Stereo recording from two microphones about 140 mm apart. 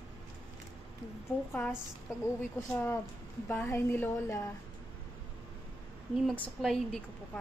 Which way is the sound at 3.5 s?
15° left (ahead or behind).